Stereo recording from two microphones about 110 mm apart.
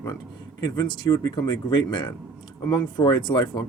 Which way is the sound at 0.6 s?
45° left (ahead or behind).